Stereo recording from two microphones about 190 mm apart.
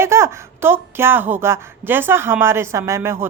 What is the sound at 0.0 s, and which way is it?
A woman's voice, 15° right (ahead or behind).